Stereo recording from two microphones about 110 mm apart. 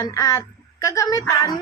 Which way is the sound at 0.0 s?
30° left (ahead or behind).